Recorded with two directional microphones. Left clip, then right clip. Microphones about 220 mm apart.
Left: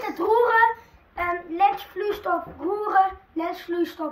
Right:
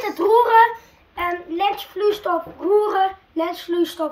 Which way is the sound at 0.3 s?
5° left (ahead or behind).